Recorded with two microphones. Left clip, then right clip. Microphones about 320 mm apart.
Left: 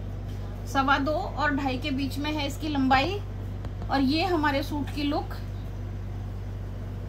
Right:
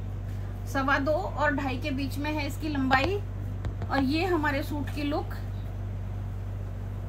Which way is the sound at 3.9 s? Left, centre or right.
Centre.